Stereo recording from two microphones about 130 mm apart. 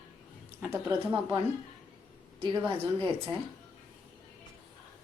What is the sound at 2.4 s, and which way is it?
Speech, 40° right (ahead or behind).